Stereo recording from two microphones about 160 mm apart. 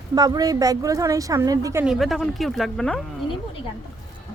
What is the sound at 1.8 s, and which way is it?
Speech, centre (ahead or behind).